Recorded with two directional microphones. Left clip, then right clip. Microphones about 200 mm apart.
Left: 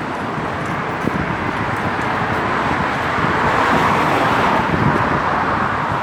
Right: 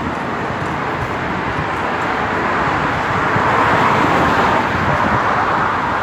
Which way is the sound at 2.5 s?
25° left (ahead or behind).